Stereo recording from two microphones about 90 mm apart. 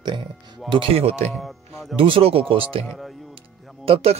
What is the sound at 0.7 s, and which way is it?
Speech, 80° right.